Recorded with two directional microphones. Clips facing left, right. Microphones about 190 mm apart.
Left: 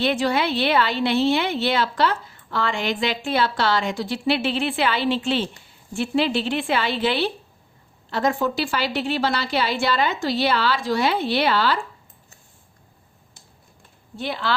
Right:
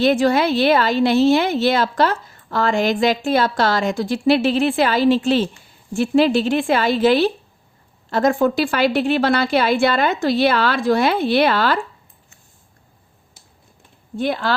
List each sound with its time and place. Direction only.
0.0 s a woman's voice: 45° right (ahead or behind)
14.2 s a woman's voice: 45° right (ahead or behind)